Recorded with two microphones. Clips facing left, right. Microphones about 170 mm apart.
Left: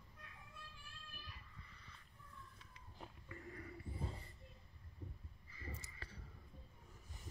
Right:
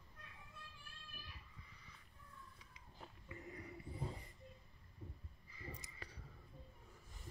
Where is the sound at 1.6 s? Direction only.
10° right (ahead or behind).